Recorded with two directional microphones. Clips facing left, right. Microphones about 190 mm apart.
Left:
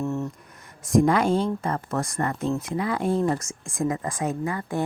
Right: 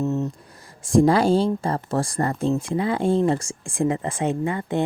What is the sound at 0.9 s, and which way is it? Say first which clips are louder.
Speech: right 3 dB; 30° right (ahead or behind).